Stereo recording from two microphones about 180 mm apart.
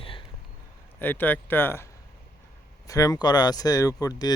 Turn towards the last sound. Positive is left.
turn(degrees=20)  # may be behind; listen again after turning